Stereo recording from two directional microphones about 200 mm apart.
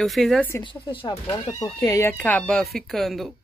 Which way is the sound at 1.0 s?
20° left (ahead or behind).